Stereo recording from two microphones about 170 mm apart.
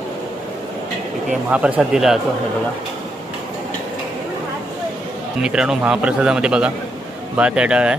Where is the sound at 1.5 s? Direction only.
5° right (ahead or behind).